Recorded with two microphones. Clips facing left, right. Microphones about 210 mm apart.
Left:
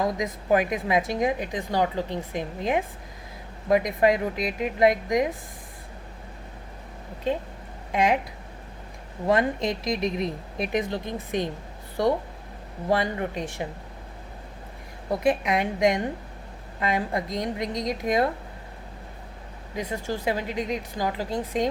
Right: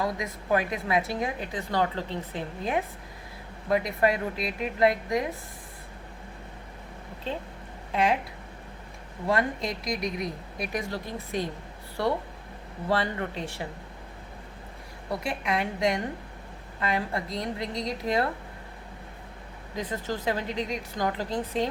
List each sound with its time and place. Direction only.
0.0 s a woman's voice: 20° left (ahead or behind)
7.9 s a woman's voice: 15° left (ahead or behind)
9.2 s speech: 20° left (ahead or behind)
12.9 s a woman's voice: 15° left (ahead or behind)
15.1 s a woman's voice: 20° left (ahead or behind)
19.7 s a woman's voice: 10° left (ahead or behind)